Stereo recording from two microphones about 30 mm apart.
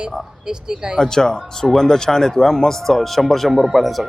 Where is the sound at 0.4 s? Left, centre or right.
Right.